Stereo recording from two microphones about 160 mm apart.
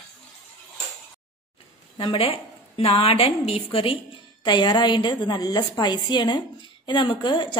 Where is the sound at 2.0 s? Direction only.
35° left (ahead or behind).